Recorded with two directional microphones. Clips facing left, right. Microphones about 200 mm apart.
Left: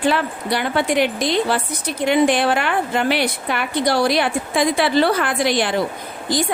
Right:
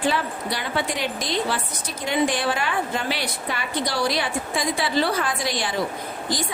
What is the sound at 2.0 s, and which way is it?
A woman's voice, 65° left (ahead or behind).